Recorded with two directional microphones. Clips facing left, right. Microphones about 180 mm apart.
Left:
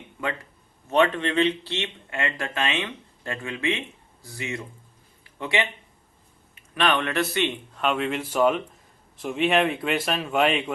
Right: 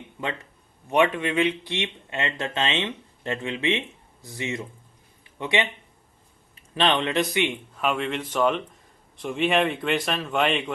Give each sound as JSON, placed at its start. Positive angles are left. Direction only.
{"t": 0.9, "sound": "speech", "side_deg": -10}
{"t": 6.7, "sound": "speech", "side_deg": -25}
{"t": 7.8, "sound": "a man's voice", "side_deg": 0}